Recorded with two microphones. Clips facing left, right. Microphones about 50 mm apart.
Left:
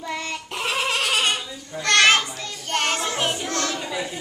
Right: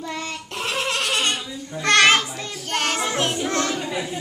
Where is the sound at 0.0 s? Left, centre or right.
Centre.